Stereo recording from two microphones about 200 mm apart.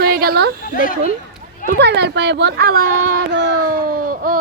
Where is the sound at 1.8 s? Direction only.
60° right (ahead or behind).